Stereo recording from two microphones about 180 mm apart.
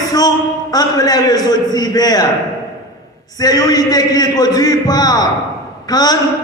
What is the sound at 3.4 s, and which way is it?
A man's voice, 20° left (ahead or behind).